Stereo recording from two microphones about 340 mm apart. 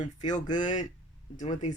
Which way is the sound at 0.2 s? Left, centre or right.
Centre.